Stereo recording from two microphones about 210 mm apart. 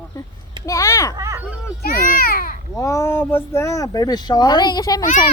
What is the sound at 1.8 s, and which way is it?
Babbling, 45° left (ahead or behind).